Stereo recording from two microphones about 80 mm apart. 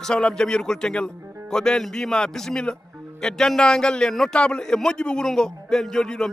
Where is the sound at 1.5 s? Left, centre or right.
Centre.